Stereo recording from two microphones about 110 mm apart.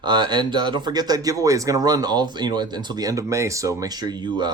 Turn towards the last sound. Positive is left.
turn(degrees=-40)  # may be behind; listen again after turning